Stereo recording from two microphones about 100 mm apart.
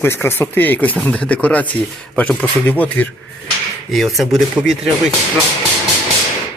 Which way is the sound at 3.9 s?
Centre (ahead or behind).